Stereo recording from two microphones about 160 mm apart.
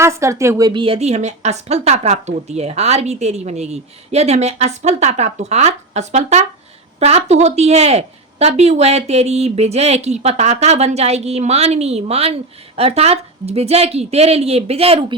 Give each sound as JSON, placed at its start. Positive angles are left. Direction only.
{"t": 0.0, "sound": "a woman's voice", "side_deg": -20}